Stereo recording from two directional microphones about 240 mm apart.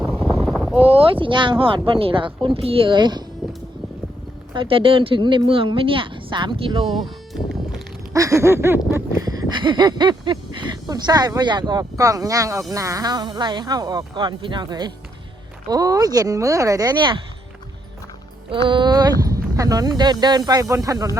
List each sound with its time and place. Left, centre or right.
0.2 s wind noise: centre
0.4 s boat: centre
0.8 s speech: right
4.5 s speech: right
6.9 s music: centre
8.1 s speech: centre
18.5 s speech: centre